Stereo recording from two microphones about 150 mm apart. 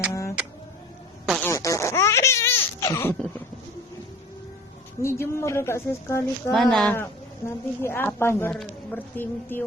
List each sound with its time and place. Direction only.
0.1 s a sound: 20° left (ahead or behind)
1.4 s laughter: 20° left (ahead or behind)
5.0 s a woman's voice: 20° left (ahead or behind)
6.5 s a woman's voice: centre (ahead or behind)